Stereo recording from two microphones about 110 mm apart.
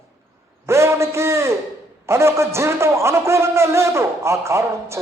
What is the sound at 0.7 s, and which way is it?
A man's voice, 25° right (ahead or behind).